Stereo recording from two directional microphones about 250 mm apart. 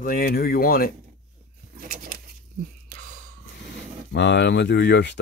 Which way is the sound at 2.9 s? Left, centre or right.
Right.